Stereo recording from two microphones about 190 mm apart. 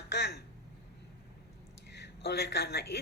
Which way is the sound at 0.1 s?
60° left (ahead or behind).